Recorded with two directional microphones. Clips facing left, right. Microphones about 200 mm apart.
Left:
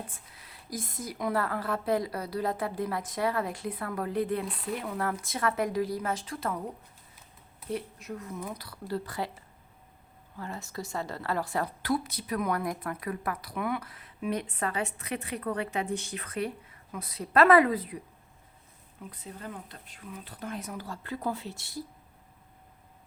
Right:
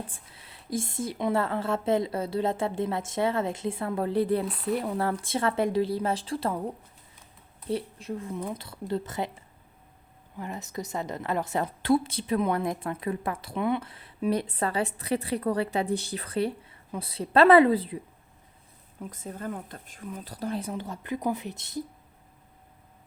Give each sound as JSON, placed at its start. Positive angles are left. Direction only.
{"t": 0.1, "sound": "a woman's voice", "side_deg": -25}
{"t": 7.7, "sound": "a woman's voice", "side_deg": -30}
{"t": 10.3, "sound": "a woman's voice", "side_deg": -20}
{"t": 19.1, "sound": "a woman's voice", "side_deg": -45}